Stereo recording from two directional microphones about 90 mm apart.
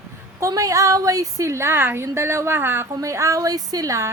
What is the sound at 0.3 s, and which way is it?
A woman's voice, 35° right (ahead or behind).